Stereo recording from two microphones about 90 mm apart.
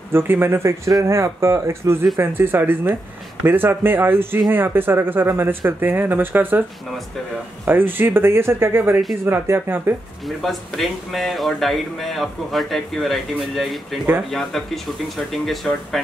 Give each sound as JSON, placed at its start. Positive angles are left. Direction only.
{"t": 0.1, "sound": "speech", "side_deg": -25}
{"t": 7.6, "sound": "speech", "side_deg": -25}
{"t": 10.2, "sound": "speech", "side_deg": 0}